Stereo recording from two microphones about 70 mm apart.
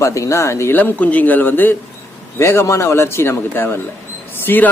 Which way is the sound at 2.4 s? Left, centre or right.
Left.